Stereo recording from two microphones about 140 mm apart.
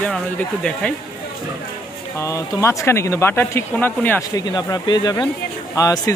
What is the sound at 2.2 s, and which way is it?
Speech, 20° left (ahead or behind).